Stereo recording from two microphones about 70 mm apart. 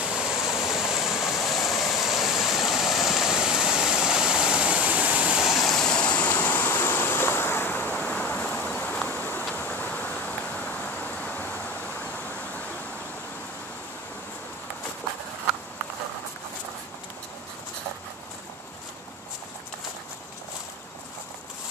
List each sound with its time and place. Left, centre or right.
0.0 s vehicle: centre
8.5 s insect: centre
9.6 s a sound: left